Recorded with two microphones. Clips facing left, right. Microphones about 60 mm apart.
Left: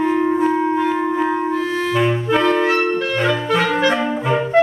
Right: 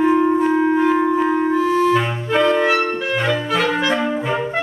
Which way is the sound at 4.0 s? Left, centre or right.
Centre.